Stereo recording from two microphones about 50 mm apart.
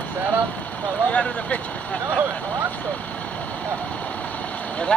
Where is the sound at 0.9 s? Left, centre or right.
Left.